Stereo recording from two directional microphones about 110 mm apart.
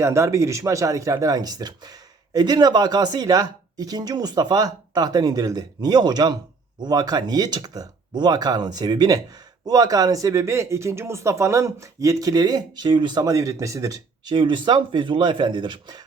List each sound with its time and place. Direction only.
0.0 s speech: 25° right (ahead or behind); by 16.0 s 40° right (ahead or behind)